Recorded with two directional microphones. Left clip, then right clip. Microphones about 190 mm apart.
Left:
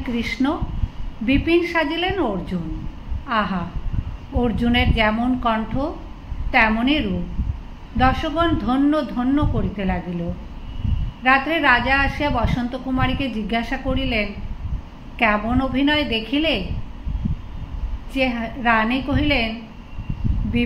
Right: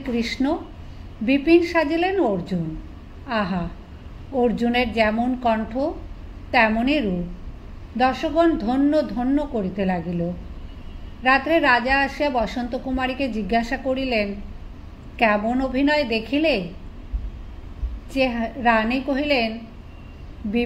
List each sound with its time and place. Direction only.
0.0 s a woman's voice: 40° right (ahead or behind)
11.2 s a woman's voice: 40° right (ahead or behind)
18.1 s a woman's voice: 40° right (ahead or behind)